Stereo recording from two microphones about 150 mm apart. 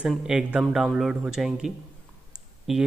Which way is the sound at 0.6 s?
Centre (ahead or behind).